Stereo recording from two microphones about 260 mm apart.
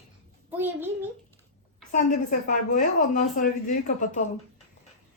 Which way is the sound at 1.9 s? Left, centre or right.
Left.